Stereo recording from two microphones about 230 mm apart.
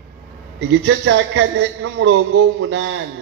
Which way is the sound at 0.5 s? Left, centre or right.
Right.